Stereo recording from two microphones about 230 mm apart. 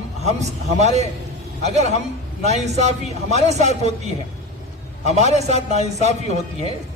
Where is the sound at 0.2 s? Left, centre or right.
Right.